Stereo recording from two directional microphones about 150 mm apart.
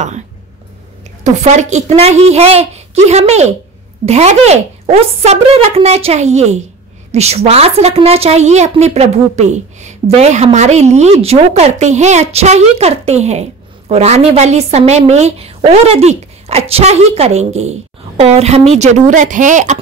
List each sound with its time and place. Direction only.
1.2 s a woman's voice: 50° right (ahead or behind)